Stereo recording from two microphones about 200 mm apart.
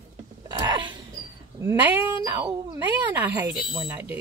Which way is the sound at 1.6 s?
10° right (ahead or behind).